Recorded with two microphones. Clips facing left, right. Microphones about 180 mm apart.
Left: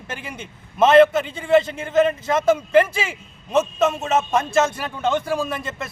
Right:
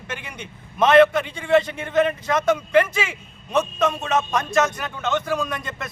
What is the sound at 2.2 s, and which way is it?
Speech, 25° left (ahead or behind).